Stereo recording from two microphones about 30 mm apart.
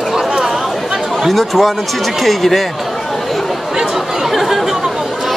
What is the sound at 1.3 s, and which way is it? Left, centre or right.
Speech, centre.